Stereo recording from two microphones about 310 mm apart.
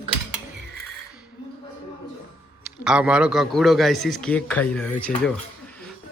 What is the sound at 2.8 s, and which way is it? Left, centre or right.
Speech, centre.